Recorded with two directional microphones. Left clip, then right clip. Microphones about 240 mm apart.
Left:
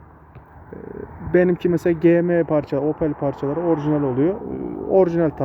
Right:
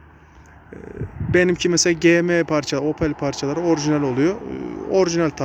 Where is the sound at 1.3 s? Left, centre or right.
Centre.